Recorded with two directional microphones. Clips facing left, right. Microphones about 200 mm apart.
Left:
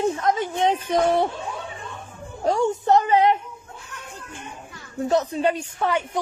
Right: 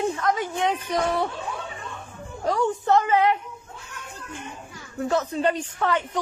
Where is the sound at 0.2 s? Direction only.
20° left (ahead or behind).